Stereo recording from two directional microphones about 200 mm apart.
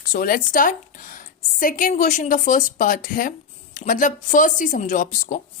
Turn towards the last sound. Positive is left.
turn(degrees=40)  # may be behind; listen again after turning